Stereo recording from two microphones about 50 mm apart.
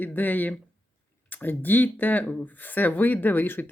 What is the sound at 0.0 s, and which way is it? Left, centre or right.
Speech, left.